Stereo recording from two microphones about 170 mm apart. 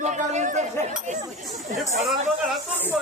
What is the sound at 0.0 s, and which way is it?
Chatter, 45° right (ahead or behind).